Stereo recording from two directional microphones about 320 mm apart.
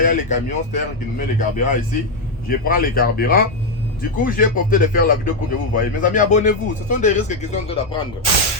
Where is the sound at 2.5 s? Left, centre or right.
Left.